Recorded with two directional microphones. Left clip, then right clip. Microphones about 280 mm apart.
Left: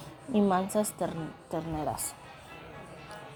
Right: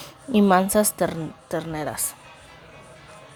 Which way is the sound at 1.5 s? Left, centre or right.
Right.